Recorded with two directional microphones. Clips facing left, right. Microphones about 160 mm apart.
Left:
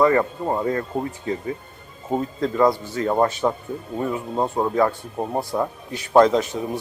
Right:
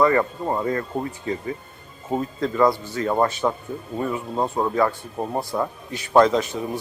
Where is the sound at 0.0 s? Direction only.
20° left (ahead or behind).